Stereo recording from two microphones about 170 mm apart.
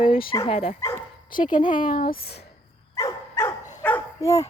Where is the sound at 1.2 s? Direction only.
55° left (ahead or behind).